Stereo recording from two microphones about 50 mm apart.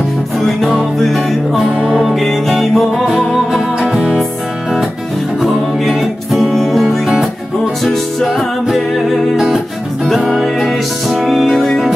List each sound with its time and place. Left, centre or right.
0.4 s music: centre
1.8 s music: right
2.1 s music: centre
3.8 s music: centre
5.4 s music: centre
7.8 s music: centre